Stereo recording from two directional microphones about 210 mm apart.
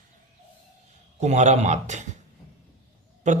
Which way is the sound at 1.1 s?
35° right (ahead or behind).